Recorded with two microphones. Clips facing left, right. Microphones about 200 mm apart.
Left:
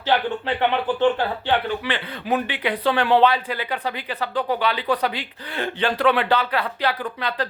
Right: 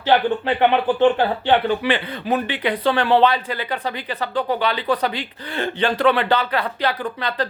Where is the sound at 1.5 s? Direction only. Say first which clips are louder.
Right 6 dB; 15° right (ahead or behind).